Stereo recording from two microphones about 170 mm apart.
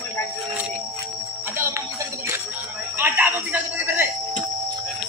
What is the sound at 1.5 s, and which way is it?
Music, 15° right (ahead or behind).